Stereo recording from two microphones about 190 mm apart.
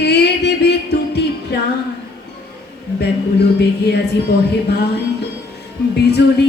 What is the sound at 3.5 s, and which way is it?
Mantra, 60° left (ahead or behind).